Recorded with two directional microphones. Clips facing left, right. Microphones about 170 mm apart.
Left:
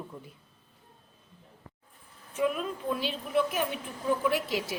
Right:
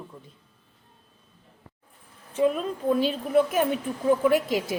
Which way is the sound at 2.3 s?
35° right (ahead or behind).